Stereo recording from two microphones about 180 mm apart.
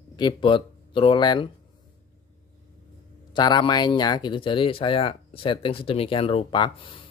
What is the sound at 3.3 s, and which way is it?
Speech, 25° left (ahead or behind).